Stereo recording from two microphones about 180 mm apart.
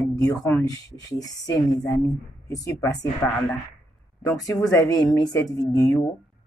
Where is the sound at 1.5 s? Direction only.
20° left (ahead or behind).